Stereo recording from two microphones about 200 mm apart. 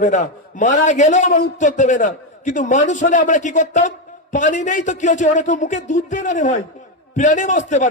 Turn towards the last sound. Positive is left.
turn(degrees=40)  # may be behind; listen again after turning